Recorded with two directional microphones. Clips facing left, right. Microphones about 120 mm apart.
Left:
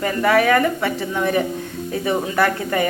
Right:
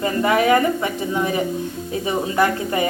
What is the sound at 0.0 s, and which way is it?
A woman's voice, 25° right (ahead or behind).